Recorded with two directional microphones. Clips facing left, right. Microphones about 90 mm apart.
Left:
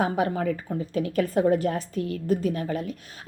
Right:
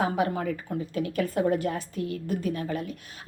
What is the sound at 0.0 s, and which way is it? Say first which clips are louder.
A woman's voice: left 2 dB; 40° left (ahead or behind).